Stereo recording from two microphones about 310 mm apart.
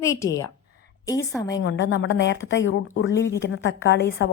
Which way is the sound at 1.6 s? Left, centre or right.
Left.